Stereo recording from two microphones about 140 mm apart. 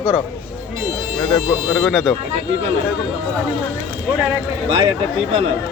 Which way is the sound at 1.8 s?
Centre (ahead or behind).